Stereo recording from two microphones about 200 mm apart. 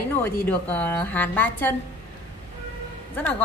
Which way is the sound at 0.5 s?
5° left (ahead or behind).